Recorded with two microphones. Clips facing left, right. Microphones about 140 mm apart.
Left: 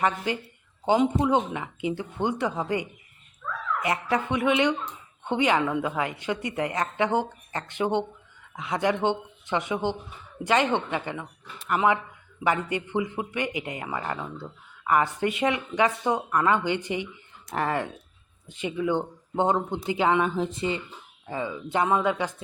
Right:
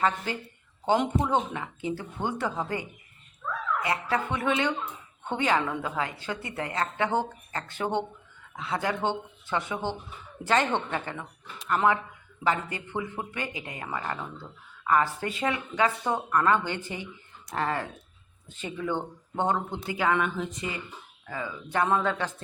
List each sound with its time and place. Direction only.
0.3 s a woman's voice: 15° left (ahead or behind)
3.8 s a woman's voice: 15° left (ahead or behind)